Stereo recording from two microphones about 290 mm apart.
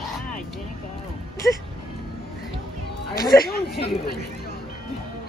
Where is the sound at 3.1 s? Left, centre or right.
Centre.